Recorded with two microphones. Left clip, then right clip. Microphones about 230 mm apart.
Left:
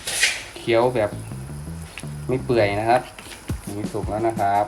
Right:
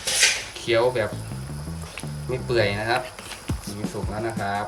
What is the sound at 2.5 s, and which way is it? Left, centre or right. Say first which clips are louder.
Speech: left 4 dB; centre.